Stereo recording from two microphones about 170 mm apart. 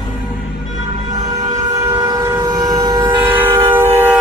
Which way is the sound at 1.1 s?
25° right (ahead or behind).